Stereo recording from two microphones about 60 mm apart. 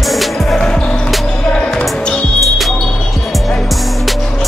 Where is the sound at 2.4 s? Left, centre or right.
Centre.